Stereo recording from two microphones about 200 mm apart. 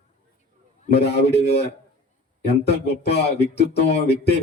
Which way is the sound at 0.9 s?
55° left (ahead or behind).